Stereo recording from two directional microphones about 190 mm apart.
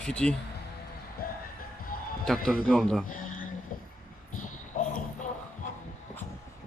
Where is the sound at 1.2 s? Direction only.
50° left (ahead or behind).